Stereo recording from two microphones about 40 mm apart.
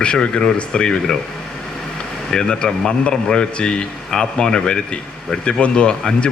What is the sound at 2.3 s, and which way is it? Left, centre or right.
A man's voice, centre.